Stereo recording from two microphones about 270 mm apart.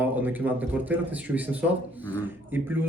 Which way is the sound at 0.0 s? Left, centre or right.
Centre.